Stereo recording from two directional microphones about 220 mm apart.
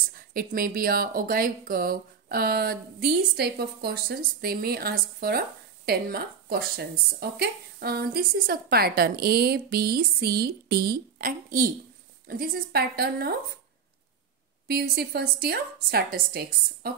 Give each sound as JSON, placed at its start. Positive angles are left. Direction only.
{"t": 0.1, "sound": "a woman's voice", "side_deg": -40}
{"t": 14.7, "sound": "a woman's voice", "side_deg": -45}